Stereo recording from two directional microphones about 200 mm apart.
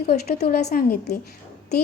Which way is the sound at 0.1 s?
50° left (ahead or behind).